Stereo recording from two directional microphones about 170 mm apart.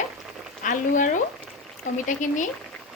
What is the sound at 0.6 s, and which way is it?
Speech, 50° left (ahead or behind).